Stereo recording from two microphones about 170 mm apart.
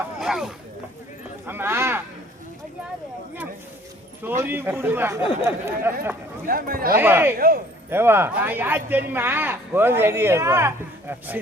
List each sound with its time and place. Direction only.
0.2 s speech: 5° right (ahead or behind)
4.2 s speech: 10° right (ahead or behind)
6.5 s a man's voice: 60° right (ahead or behind)
7.0 s speech: 10° right (ahead or behind)
7.3 s a man's voice: 60° right (ahead or behind)
7.9 s speech: 15° right (ahead or behind)